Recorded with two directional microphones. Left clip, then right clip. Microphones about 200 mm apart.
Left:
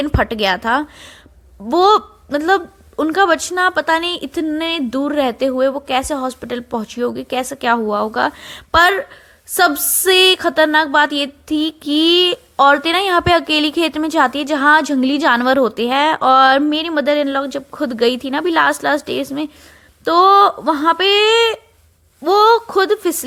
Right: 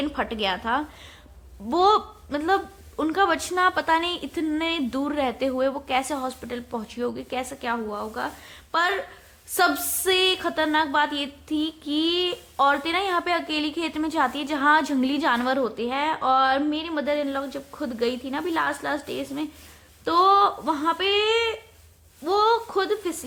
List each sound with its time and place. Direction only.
0.0 s a woman's voice: 30° left (ahead or behind)